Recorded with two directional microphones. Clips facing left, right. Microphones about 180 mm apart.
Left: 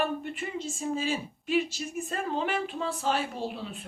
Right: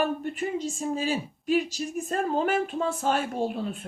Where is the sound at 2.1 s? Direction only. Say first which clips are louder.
Right 5 dB; 45° right (ahead or behind).